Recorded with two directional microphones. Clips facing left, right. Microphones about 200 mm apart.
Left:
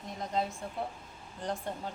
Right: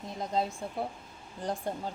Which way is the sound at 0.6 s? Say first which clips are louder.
Right 3 dB; 30° right (ahead or behind).